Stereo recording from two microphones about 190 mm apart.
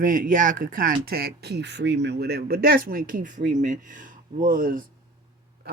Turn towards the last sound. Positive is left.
turn(degrees=-45)  # may be behind; listen again after turning